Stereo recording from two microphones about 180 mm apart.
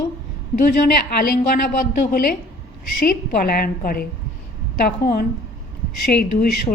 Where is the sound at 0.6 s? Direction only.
55° left (ahead or behind).